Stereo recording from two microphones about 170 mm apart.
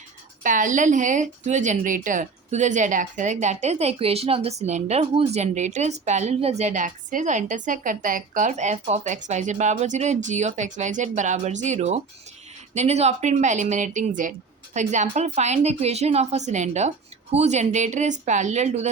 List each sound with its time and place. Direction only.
0.4 s a woman's voice: 50° right (ahead or behind)